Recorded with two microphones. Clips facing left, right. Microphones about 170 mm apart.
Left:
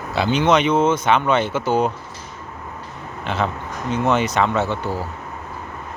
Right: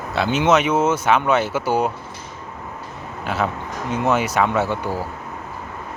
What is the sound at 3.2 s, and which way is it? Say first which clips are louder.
Speech: even; 5° right (ahead or behind).